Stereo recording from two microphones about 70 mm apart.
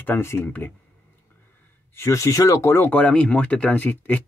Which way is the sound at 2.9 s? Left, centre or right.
Centre.